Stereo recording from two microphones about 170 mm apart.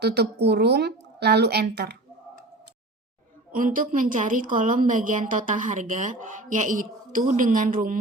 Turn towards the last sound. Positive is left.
turn(degrees=-55)  # may be behind; listen again after turning